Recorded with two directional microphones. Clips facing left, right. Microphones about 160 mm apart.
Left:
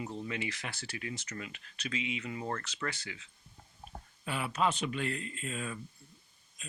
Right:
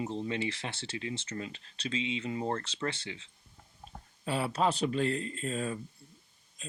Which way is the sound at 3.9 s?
30° right (ahead or behind).